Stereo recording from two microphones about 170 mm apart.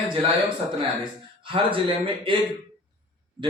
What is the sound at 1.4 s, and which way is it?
A man's voice, 30° right (ahead or behind).